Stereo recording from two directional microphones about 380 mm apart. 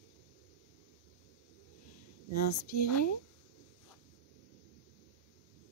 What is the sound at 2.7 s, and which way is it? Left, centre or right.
Speech, left.